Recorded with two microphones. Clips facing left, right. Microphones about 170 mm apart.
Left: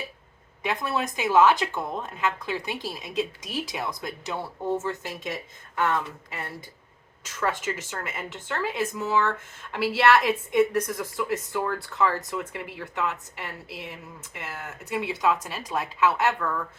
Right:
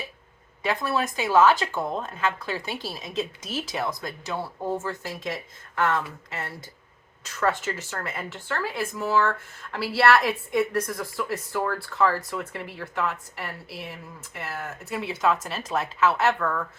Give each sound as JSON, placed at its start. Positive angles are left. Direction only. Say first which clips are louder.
{"t": 0.7, "sound": "a woman's voice", "louder": "right 2 dB", "side_deg": 15}
{"t": 7.3, "sound": "a woman's voice", "louder": "right 2 dB", "side_deg": 15}